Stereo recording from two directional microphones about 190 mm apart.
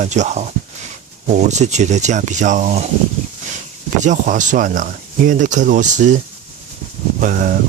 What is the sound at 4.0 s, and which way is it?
Speech, 40° right (ahead or behind).